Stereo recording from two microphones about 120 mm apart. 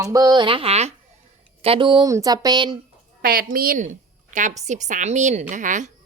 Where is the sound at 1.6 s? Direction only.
50° right (ahead or behind).